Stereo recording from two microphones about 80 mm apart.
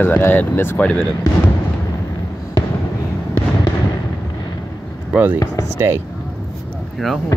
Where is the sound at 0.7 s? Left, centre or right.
Centre.